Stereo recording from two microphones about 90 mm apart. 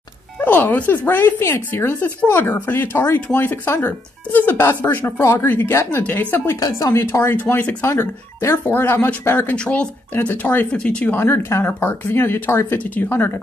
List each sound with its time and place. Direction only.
0.4 s speech: 20° left (ahead or behind)
6.6 s a woman's voice: 35° left (ahead or behind); by 11.1 s 10° left (ahead or behind)
11.1 s speech: 25° left (ahead or behind)